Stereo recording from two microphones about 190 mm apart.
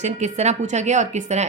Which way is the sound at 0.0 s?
35° right (ahead or behind).